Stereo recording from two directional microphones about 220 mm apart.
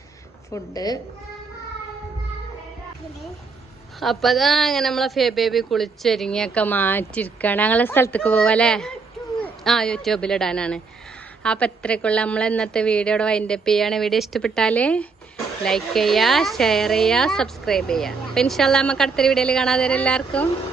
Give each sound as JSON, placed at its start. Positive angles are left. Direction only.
{"t": 0.5, "sound": "a woman's voice", "side_deg": 15}
{"t": 4.0, "sound": "a woman's voice", "side_deg": 0}